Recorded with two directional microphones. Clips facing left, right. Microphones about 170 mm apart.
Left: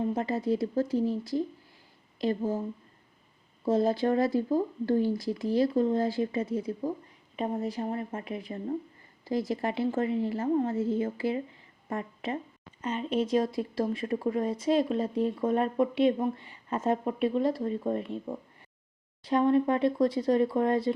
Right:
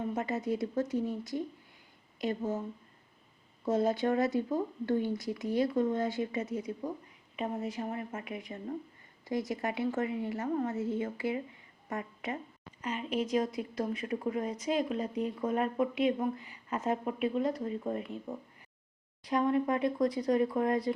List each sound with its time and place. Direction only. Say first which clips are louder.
0.0 s speech: left 4 dB; 30° left (ahead or behind)
3.7 s a woman's voice: left 3 dB; 30° left (ahead or behind)